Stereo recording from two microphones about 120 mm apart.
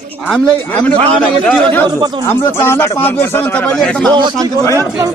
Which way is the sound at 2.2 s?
20° left (ahead or behind).